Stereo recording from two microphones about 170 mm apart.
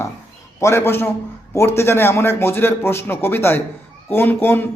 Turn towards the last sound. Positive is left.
turn(degrees=10)  # may be behind; listen again after turning